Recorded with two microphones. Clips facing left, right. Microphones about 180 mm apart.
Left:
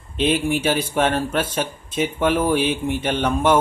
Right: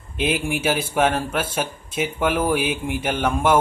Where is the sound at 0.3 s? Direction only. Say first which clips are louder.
Left 2 dB; 10° right (ahead or behind).